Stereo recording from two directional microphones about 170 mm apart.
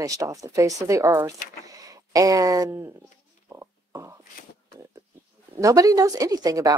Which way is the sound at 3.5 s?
15° right (ahead or behind).